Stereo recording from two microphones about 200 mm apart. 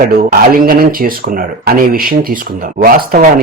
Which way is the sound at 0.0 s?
45° right (ahead or behind).